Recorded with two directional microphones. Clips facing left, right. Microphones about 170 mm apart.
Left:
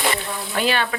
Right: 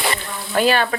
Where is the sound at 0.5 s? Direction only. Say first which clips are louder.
Right 5 dB; 40° right (ahead or behind).